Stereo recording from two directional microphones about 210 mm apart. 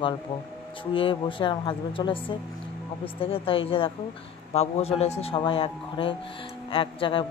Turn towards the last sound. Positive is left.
turn(degrees=25)  # may be behind; listen again after turning